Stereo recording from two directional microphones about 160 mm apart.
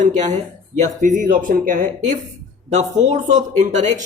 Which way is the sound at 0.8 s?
55° right (ahead or behind).